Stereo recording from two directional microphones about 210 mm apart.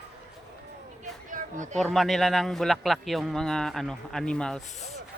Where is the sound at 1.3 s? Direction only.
35° right (ahead or behind).